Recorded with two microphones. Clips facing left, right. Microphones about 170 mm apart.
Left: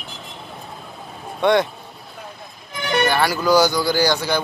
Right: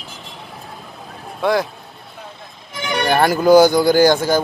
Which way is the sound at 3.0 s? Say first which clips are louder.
Right 6 dB; 50° right (ahead or behind).